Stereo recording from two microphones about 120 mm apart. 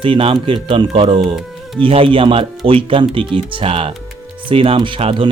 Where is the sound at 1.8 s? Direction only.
45° right (ahead or behind).